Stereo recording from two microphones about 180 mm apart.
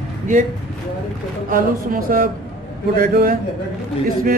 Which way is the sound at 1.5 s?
50° right (ahead or behind).